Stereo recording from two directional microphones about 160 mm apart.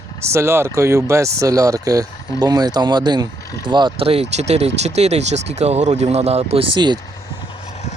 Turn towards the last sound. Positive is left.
turn(degrees=-30)  # may be behind; listen again after turning